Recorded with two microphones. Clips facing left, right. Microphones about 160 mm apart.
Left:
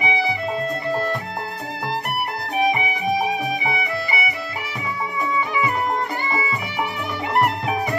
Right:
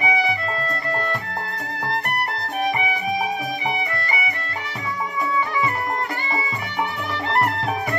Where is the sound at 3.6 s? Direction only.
5° left (ahead or behind).